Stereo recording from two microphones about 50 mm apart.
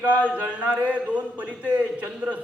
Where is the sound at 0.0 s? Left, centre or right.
Right.